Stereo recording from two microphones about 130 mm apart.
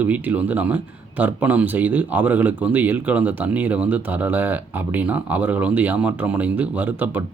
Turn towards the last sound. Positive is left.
turn(degrees=-15)  # may be behind; listen again after turning